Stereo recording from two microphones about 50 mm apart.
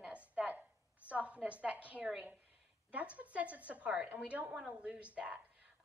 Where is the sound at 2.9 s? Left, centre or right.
Right.